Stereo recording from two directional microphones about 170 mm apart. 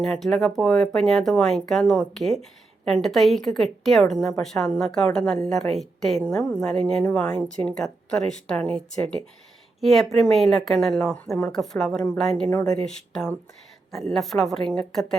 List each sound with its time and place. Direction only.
0.0 s speech: centre (ahead or behind)